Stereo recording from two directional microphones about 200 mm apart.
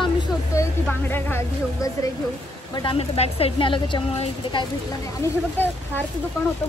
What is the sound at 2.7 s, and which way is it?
A woman's voice, 25° left (ahead or behind).